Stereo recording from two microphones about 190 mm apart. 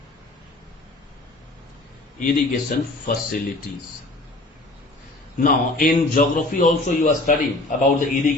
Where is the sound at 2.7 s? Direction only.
45° left (ahead or behind).